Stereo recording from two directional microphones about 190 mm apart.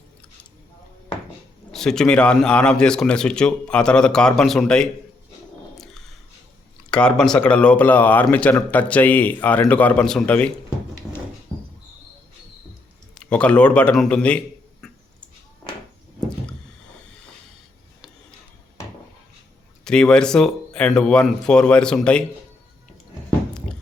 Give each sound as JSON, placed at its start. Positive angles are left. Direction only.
{"t": 1.7, "sound": "speech", "side_deg": 5}
{"t": 5.7, "sound": "a sound", "side_deg": 0}
{"t": 6.9, "sound": "speech", "side_deg": 5}
{"t": 13.1, "sound": "speech", "side_deg": 5}
{"t": 19.8, "sound": "speech", "side_deg": 5}